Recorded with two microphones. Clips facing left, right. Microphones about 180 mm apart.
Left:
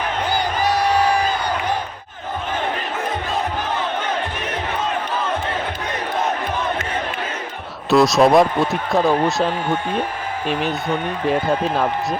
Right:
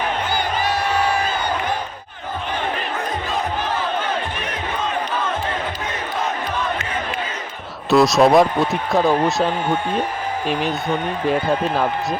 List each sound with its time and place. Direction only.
7.9 s speech: centre (ahead or behind)